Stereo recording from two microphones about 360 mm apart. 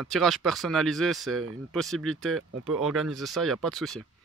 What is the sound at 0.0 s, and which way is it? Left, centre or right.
Speech, centre.